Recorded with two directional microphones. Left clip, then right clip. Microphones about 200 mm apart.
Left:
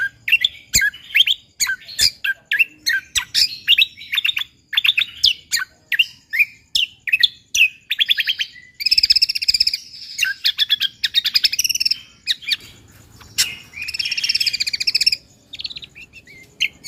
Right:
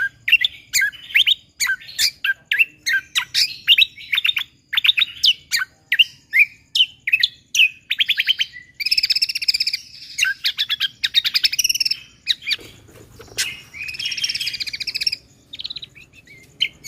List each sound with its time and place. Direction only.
0.3 s bird: 10° right (ahead or behind)
13.3 s bird: 5° left (ahead or behind)
14.4 s chirp: 5° left (ahead or behind)